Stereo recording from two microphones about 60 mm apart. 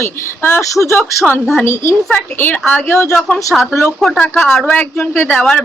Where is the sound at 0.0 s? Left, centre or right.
Left.